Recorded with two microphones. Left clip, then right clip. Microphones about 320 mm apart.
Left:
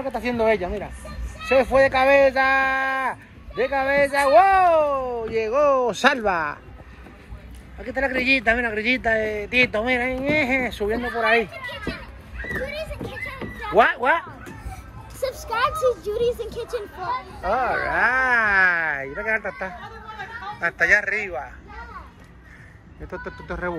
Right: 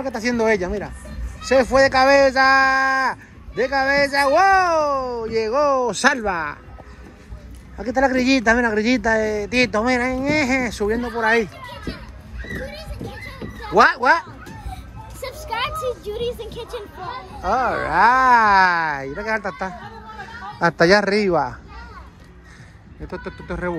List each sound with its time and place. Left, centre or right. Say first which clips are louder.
0.3 s speech: right 2 dB; centre
7.8 s speech: right 4 dB; centre
13.7 s speech: right 3 dB; centre
15.5 s speech: left 3 dB; centre
23.0 s speech: right 2 dB; centre